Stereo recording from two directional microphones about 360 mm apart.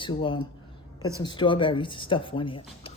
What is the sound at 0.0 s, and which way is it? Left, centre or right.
A man's voice, centre.